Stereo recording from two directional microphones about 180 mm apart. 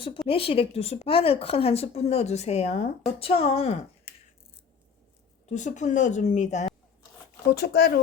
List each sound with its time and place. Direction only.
0.3 s a woman's voice: 30° left (ahead or behind)
5.5 s a woman's voice: 40° left (ahead or behind)
7.5 s speech: 60° left (ahead or behind)